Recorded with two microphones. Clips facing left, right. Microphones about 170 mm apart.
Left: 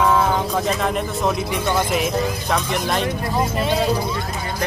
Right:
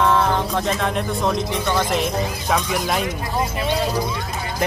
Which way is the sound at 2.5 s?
5° right (ahead or behind).